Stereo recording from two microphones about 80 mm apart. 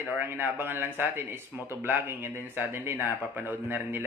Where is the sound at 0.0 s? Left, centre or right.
Right.